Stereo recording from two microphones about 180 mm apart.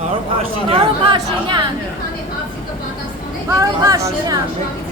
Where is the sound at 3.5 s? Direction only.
20° right (ahead or behind).